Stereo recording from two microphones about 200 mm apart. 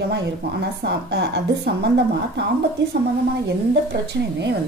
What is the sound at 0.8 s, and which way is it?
Speech, 55° right (ahead or behind).